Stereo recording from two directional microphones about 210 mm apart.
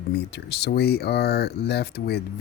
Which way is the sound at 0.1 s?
55° left (ahead or behind).